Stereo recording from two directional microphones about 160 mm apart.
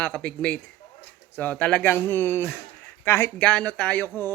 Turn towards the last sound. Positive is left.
turn(degrees=10)  # may be behind; listen again after turning